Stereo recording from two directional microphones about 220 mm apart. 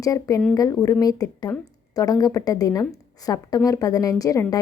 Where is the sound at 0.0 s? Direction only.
15° left (ahead or behind).